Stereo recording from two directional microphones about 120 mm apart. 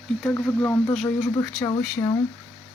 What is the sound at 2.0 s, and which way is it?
Speech, 30° left (ahead or behind).